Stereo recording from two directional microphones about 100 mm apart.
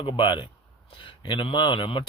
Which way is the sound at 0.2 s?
55° left (ahead or behind).